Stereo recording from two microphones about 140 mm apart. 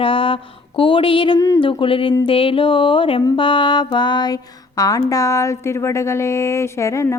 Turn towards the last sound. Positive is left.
turn(degrees=20)  # may be behind; listen again after turning